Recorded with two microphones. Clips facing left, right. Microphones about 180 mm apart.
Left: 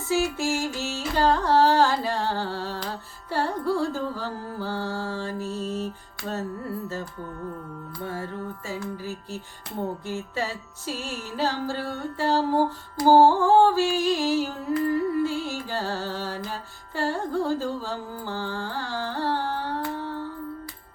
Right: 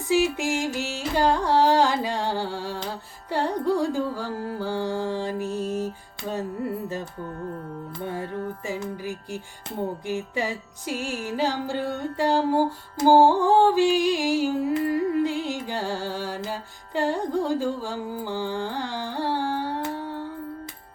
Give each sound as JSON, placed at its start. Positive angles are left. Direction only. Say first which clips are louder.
{"t": 0.1, "sound": "carnatic music", "louder": "right 2 dB", "side_deg": -15}
{"t": 7.9, "sound": "music", "louder": "right 2 dB", "side_deg": -20}